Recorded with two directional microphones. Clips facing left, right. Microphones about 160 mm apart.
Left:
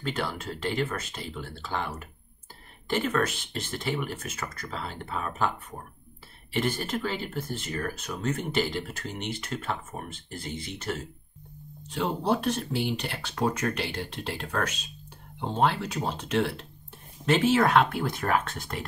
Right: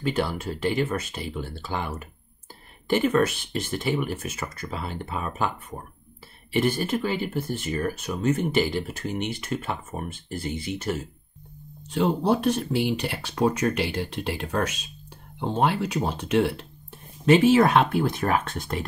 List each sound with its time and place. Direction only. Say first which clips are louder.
0.0 s speech: right 5 dB; 10° right (ahead or behind)
6.5 s speech: right 5 dB; 10° right (ahead or behind); by 18.4 s 25° right (ahead or behind)